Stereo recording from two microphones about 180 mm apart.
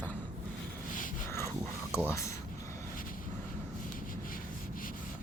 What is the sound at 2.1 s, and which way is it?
Speech, 15° left (ahead or behind).